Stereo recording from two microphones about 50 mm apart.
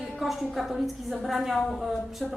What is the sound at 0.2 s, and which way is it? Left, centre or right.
A woman's voice, centre.